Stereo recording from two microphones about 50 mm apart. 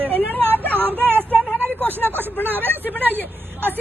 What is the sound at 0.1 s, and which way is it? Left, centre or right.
Speech, left.